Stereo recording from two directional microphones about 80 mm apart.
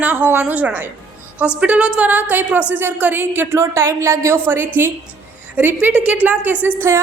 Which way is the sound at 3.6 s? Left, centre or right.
Right.